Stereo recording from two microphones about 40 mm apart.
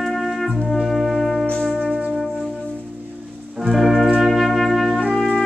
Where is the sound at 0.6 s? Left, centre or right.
Centre.